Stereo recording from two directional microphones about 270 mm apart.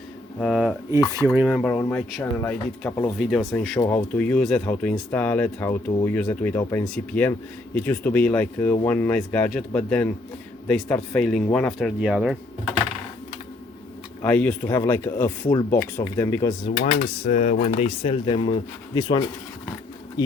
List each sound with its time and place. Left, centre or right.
0.3 s speech: centre
14.2 s speech: centre
16.6 s speech: left